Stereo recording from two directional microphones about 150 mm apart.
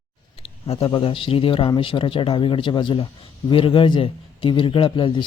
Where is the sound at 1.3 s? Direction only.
40° left (ahead or behind).